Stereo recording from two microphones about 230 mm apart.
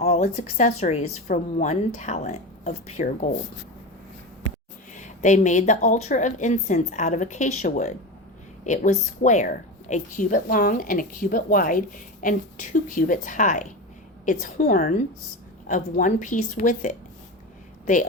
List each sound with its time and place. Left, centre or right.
0.0 s a woman's voice: left
4.9 s a woman's voice: left